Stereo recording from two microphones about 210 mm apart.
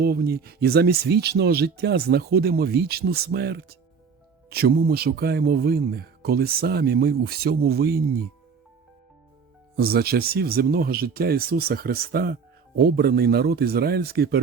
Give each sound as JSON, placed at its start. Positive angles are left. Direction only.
{"t": 0.0, "sound": "speech", "side_deg": -50}
{"t": 9.7, "sound": "speech", "side_deg": -45}